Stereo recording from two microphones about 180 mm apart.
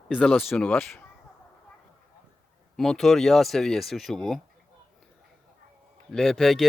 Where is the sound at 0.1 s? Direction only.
5° left (ahead or behind).